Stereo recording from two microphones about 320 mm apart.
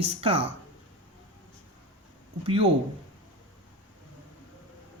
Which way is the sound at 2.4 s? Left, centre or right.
Centre.